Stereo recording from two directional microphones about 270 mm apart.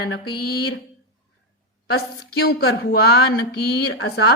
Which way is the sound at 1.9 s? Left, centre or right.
Left.